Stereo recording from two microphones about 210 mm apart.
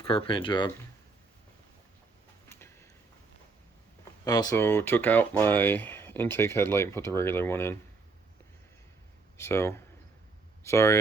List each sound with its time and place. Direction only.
0.1 s speech: 25° left (ahead or behind)
2.5 s tick-tock: 10° left (ahead or behind)
4.3 s speech: 20° left (ahead or behind)
9.4 s speech: 10° left (ahead or behind)